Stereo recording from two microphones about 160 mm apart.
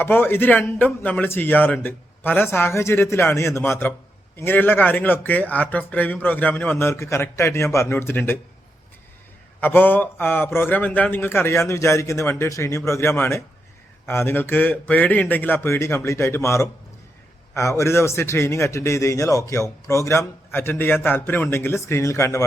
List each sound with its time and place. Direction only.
0.0 s a man's voice: 15° left (ahead or behind)
9.6 s a man's voice: 10° left (ahead or behind)